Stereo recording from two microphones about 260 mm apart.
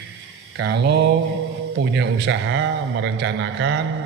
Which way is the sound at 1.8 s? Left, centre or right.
Right.